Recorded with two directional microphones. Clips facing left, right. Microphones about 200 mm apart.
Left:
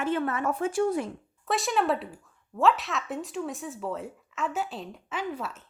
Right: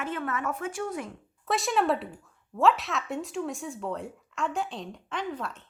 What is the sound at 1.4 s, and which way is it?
Speech, centre (ahead or behind).